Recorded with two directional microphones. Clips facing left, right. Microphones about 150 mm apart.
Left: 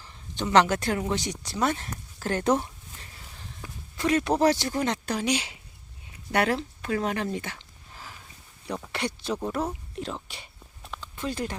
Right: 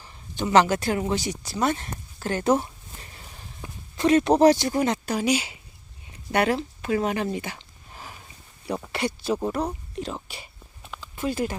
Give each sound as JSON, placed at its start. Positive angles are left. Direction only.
{"t": 0.0, "sound": "speech", "side_deg": -5}
{"t": 3.3, "sound": "speech", "side_deg": -20}
{"t": 8.6, "sound": "speech", "side_deg": -5}
{"t": 10.2, "sound": "a sound", "side_deg": -5}